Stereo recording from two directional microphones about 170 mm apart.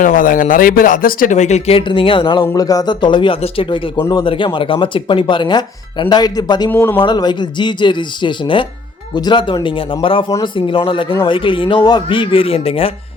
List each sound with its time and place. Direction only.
0.0 s speech: 50° left (ahead or behind); by 6.7 s 25° left (ahead or behind)
6.7 s speech: 10° left (ahead or behind)
7.0 s speech: 25° left (ahead or behind)